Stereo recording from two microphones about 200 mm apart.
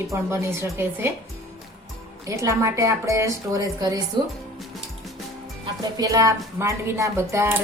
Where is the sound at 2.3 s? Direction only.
15° right (ahead or behind).